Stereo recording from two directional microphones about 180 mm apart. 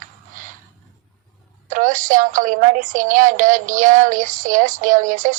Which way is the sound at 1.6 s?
45° right (ahead or behind).